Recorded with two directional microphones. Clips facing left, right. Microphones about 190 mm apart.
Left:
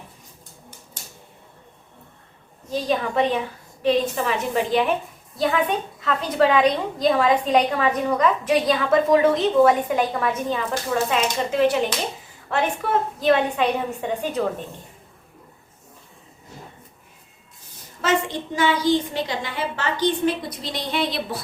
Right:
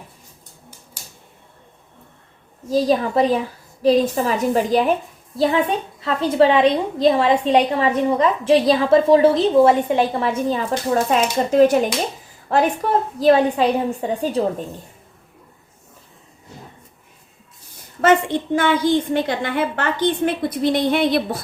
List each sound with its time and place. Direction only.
2.6 s a woman's voice: 35° right (ahead or behind)
18.0 s a woman's voice: 55° right (ahead or behind)